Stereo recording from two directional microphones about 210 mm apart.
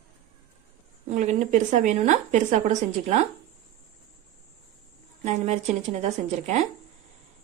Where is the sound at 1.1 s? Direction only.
35° right (ahead or behind).